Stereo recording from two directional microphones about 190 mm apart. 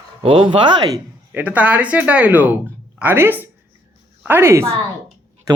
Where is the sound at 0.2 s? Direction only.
30° right (ahead or behind).